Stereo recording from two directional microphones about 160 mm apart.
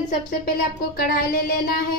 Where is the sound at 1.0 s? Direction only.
70° left (ahead or behind).